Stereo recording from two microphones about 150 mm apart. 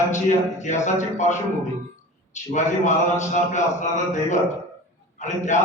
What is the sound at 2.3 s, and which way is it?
A man's voice, 50° left (ahead or behind).